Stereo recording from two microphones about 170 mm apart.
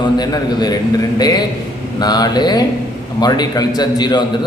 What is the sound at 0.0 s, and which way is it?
A man's voice, 25° left (ahead or behind).